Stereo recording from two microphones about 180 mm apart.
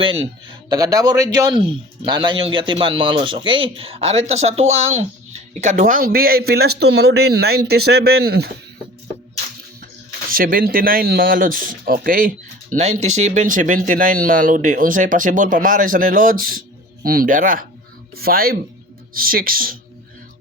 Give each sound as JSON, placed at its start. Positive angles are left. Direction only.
{"t": 0.0, "sound": "a man's voice", "side_deg": -30}
{"t": 10.3, "sound": "speech", "side_deg": -55}
{"t": 12.7, "sound": "a man's voice", "side_deg": -40}